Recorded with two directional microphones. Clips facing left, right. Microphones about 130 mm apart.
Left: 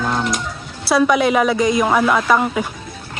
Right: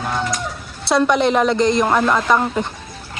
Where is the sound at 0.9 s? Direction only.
5° left (ahead or behind).